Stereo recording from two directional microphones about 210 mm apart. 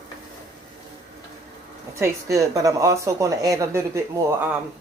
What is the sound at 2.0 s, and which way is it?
Speech, 15° right (ahead or behind).